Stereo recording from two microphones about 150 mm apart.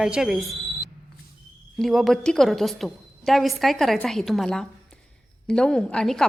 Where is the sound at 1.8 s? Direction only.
Centre (ahead or behind).